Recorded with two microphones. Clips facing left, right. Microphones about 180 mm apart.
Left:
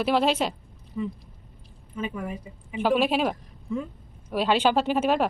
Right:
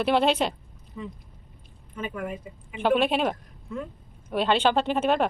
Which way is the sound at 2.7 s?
5° left (ahead or behind).